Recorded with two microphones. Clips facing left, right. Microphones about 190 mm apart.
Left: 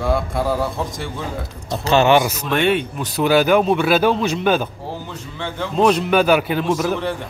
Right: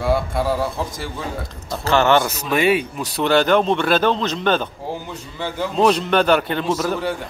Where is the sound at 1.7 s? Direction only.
20° left (ahead or behind).